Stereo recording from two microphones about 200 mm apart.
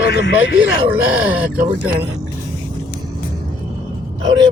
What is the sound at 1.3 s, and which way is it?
Speech, 5° right (ahead or behind).